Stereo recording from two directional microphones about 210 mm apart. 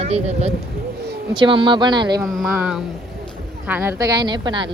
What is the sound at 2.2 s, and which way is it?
Speech, centre (ahead or behind).